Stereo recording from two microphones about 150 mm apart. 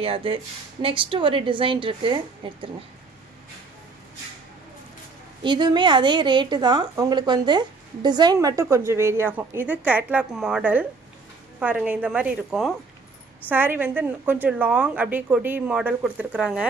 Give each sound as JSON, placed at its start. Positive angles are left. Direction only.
{"t": 0.0, "sound": "a woman's voice", "side_deg": -40}
{"t": 5.4, "sound": "a woman's voice", "side_deg": -30}
{"t": 13.5, "sound": "speech", "side_deg": -15}